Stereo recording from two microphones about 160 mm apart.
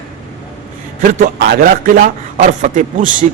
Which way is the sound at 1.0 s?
60° right (ahead or behind).